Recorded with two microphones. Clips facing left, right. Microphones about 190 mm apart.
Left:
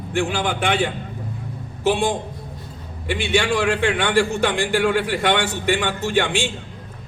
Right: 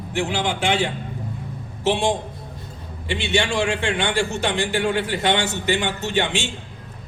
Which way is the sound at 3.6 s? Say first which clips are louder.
Left 3 dB; 60° left (ahead or behind).